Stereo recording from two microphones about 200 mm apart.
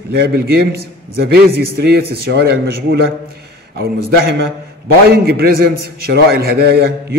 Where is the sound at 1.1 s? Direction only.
50° right (ahead or behind).